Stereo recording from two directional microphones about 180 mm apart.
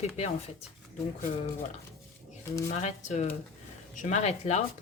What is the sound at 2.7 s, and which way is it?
A woman's voice, 40° left (ahead or behind).